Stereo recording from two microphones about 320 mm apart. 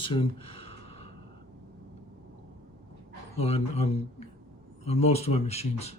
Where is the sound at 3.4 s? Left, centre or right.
Centre.